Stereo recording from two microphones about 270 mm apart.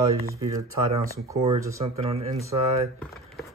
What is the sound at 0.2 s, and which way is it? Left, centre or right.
Speech, centre.